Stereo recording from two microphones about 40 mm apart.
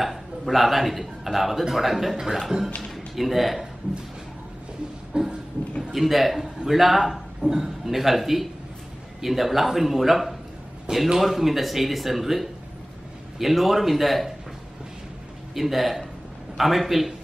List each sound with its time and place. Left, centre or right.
0.0 s a man's voice: centre
5.1 s a sound: right
5.9 s a man's voice: centre
15.5 s a man's voice: centre